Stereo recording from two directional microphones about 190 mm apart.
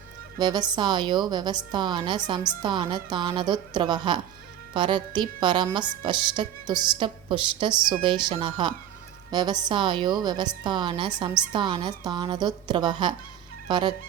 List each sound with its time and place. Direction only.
0.3 s a woman's voice: 20° right (ahead or behind)
13.7 s fowl: 25° right (ahead or behind)